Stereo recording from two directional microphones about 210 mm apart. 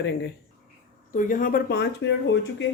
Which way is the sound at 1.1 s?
40° left (ahead or behind).